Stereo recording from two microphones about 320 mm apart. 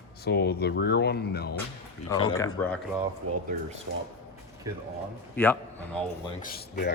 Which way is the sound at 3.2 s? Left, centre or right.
Right.